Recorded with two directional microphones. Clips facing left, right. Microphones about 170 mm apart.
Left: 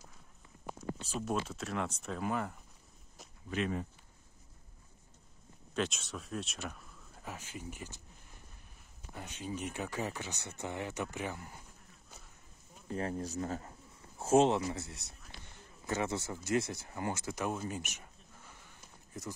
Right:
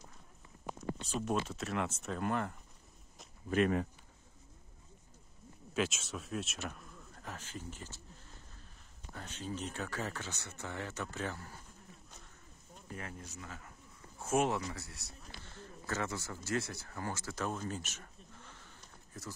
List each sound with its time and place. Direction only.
1.2 s speech: centre (ahead or behind)
3.4 s speech: 50° right (ahead or behind)
5.8 s speech: 5° right (ahead or behind); by 8.0 s 15° left (ahead or behind)
9.1 s speech: 15° left (ahead or behind)
12.9 s a man's voice: 35° left (ahead or behind); by 19.3 s 15° left (ahead or behind)